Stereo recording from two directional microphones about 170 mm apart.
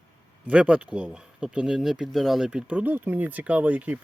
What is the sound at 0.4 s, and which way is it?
Speech, 5° right (ahead or behind).